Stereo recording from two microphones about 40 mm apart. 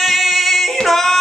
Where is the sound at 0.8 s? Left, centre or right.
Centre.